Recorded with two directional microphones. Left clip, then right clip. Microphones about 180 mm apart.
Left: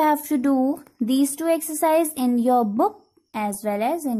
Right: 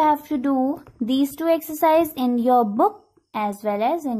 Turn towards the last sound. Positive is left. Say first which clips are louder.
# right 2 dB
turn(degrees=25)  # may be behind; listen again after turning